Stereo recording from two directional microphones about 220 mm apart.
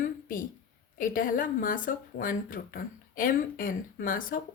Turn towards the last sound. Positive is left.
turn(degrees=40)  # may be behind; listen again after turning